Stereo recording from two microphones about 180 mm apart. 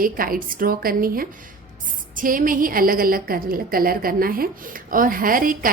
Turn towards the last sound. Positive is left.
turn(degrees=-50)  # may be behind; listen again after turning